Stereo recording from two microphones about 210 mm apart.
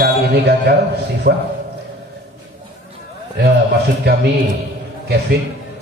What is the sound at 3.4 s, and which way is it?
Speech, 50° right (ahead or behind).